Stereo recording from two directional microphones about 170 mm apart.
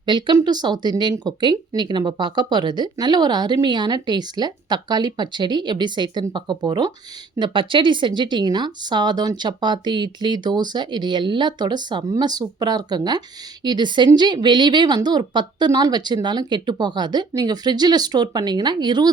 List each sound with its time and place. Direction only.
0.0 s speech: 25° right (ahead or behind)